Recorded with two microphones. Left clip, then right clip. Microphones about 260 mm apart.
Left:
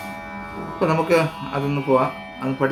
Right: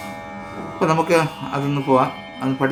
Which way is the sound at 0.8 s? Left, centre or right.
Centre.